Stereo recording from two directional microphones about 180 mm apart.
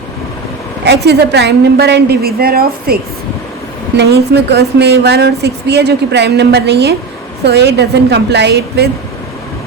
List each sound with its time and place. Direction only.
1.0 s a woman's voice: 65° right (ahead or behind)